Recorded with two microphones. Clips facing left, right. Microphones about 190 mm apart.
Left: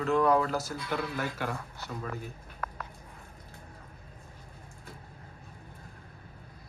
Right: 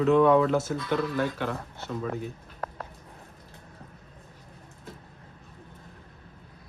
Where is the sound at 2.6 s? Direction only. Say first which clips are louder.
Right 3 dB; 25° right (ahead or behind).